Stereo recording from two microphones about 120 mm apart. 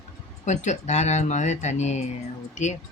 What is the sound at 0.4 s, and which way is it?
Speech, 75° left (ahead or behind).